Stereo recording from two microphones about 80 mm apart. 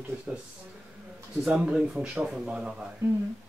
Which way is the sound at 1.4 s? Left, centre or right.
Centre.